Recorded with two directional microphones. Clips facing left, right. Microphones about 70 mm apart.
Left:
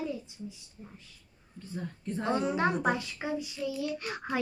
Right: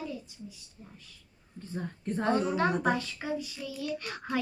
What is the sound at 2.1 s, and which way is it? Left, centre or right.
Speech, right.